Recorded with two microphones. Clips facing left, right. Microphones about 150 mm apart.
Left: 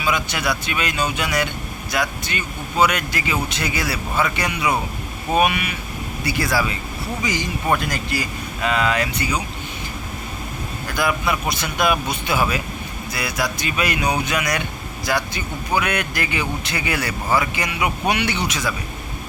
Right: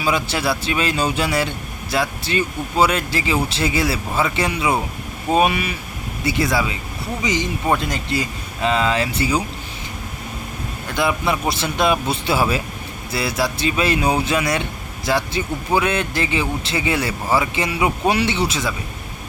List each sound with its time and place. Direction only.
0.0 s speech: 30° right (ahead or behind)
10.8 s speech: 25° right (ahead or behind)